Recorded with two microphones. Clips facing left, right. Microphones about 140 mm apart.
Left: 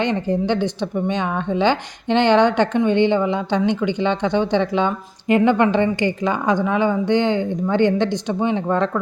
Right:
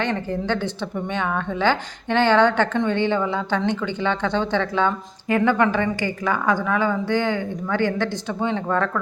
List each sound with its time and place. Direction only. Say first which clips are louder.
0.0 s speech: left 4 dB; 15° left (ahead or behind)